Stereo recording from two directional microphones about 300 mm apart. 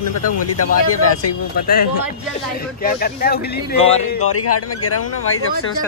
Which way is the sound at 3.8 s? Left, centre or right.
Centre.